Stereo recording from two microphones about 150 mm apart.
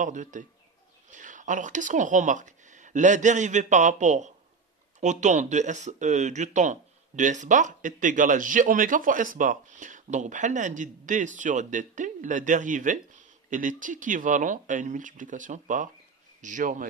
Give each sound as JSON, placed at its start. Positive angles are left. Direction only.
{"t": 0.0, "sound": "speech", "side_deg": -55}